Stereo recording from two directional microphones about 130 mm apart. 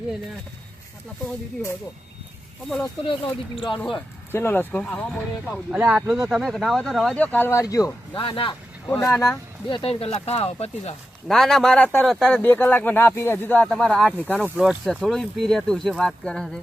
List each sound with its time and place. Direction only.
2.6 s speech: 5° left (ahead or behind)
3.0 s speech: 40° left (ahead or behind)
4.3 s speech: 15° left (ahead or behind)
5.7 s speech: 5° right (ahead or behind)
7.3 s speech: 15° left (ahead or behind)
8.1 s speech: 40° left (ahead or behind)
8.9 s speech: 20° left (ahead or behind)
9.6 s speech: 40° left (ahead or behind)
11.3 s speech: 5° left (ahead or behind)
14.6 s speech: centre (ahead or behind)